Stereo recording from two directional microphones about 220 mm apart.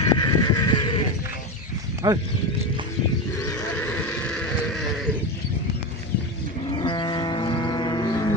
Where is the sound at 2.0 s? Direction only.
15° right (ahead or behind).